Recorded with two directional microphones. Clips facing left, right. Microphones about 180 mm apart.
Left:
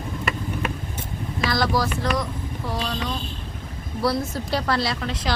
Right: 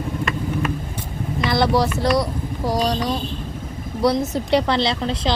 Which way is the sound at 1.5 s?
25° right (ahead or behind).